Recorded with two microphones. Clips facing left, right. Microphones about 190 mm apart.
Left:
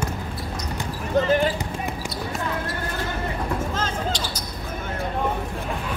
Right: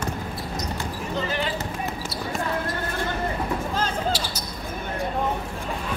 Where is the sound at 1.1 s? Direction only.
50° left (ahead or behind).